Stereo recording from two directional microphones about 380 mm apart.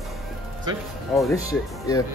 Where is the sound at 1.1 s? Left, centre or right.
Centre.